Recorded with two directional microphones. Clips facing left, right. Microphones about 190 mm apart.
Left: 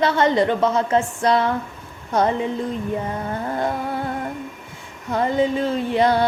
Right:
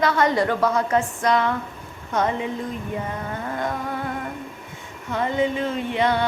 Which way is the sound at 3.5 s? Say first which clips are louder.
Left 3 dB; 30° left (ahead or behind).